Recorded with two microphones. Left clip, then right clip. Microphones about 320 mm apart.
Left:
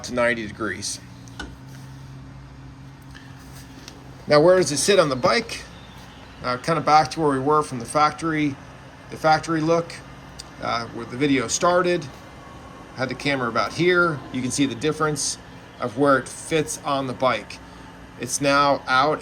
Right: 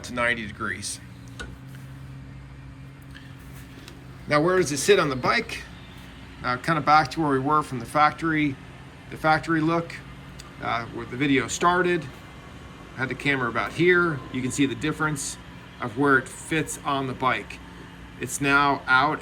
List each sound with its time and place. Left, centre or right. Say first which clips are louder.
0.0 s speech: left 3 dB; centre
4.3 s speech: left 6 dB; centre
16.0 s speech: left 1 dB; centre